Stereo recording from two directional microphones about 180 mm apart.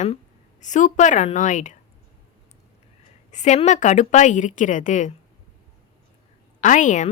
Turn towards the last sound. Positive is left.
turn(degrees=45)  # may be behind; listen again after turning